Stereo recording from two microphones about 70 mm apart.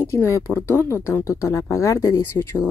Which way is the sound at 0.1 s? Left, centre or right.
Left.